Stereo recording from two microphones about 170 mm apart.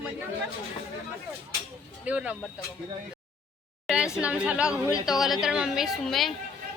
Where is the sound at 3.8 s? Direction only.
5° right (ahead or behind).